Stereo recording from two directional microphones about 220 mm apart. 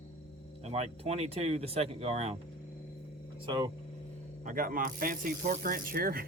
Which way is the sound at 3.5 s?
20° right (ahead or behind).